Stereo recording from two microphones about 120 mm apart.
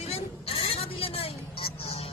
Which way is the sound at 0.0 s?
55° left (ahead or behind).